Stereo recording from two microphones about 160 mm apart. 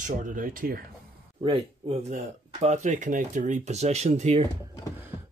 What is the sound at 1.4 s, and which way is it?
Speech, 35° right (ahead or behind).